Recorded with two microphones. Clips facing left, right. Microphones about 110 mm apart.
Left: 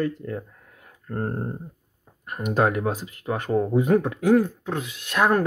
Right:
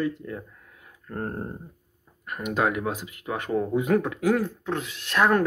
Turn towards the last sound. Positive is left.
turn(degrees=15)  # may be behind; listen again after turning